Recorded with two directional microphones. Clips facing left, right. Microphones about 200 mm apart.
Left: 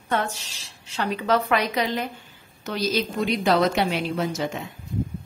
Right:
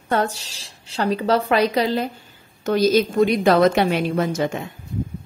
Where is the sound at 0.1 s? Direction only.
35° right (ahead or behind).